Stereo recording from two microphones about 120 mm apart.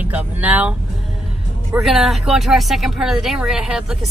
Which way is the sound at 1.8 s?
Centre (ahead or behind).